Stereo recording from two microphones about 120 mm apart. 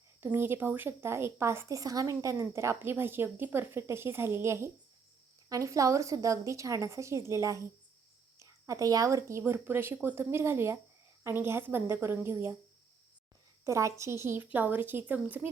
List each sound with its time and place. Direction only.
0.2 s a woman's voice: 20° right (ahead or behind)
13.7 s a woman's voice: 25° right (ahead or behind)